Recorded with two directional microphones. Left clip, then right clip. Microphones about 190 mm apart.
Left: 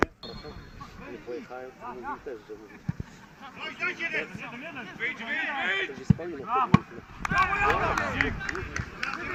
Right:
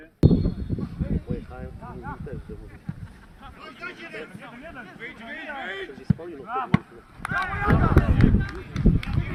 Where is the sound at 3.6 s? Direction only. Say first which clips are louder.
Left 7 dB; 80° right.